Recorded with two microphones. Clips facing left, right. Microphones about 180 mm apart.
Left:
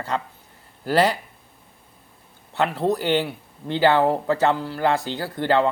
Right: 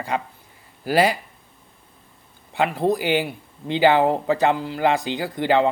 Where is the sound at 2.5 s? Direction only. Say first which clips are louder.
Right 1 dB; 10° right (ahead or behind).